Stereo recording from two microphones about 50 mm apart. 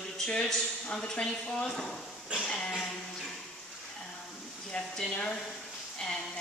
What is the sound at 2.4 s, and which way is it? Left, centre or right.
Speech, centre.